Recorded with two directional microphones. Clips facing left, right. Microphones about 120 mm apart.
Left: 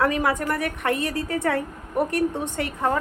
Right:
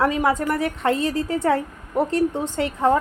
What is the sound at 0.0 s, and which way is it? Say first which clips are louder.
A woman's voice: right 2 dB; 25° right (ahead or behind).